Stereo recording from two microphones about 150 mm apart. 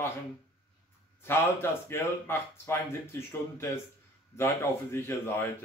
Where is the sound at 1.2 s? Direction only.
15° left (ahead or behind).